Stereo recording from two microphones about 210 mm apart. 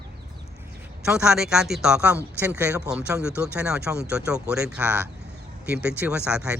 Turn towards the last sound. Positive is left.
turn(degrees=-5)  # may be behind; listen again after turning